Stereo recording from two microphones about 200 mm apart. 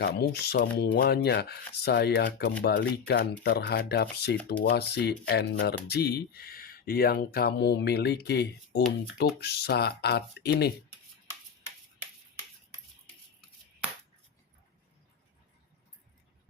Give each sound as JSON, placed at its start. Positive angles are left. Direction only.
{"t": 0.0, "sound": "speech", "side_deg": 55}